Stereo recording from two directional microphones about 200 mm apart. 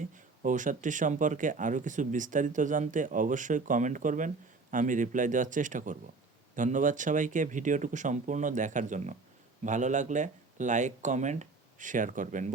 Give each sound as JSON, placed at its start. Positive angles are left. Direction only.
{"t": 0.4, "sound": "speech", "side_deg": -40}